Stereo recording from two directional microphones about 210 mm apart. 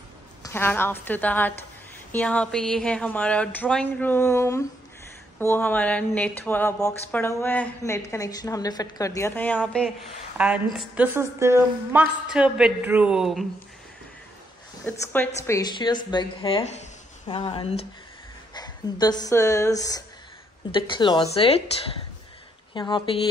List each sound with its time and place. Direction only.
0.4 s a woman's voice: 10° left (ahead or behind)
14.9 s speech: 10° left (ahead or behind); by 17.8 s 25° left (ahead or behind)
18.5 s a sound: 20° left (ahead or behind)
19.2 s speech: 15° left (ahead or behind)
22.8 s speech: 20° left (ahead or behind)